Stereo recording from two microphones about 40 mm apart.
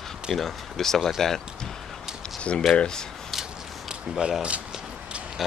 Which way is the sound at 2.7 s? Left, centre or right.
Centre.